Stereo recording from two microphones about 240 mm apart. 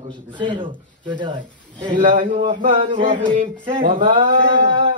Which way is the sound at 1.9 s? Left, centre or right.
Right.